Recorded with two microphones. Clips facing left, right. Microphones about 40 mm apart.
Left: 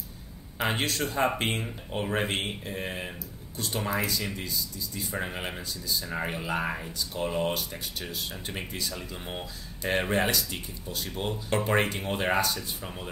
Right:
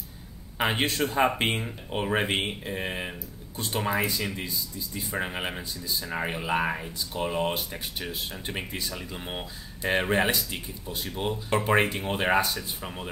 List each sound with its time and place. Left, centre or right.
0.6 s speech: right